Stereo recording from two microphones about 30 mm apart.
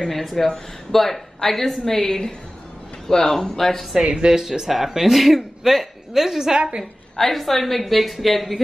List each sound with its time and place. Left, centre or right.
0.1 s a woman's voice: centre
4.0 s speech: right
4.3 s speech: centre
6.5 s speech: right
7.2 s a woman's voice: centre